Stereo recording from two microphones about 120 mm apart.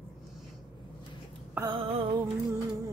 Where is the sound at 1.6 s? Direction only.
45° right (ahead or behind).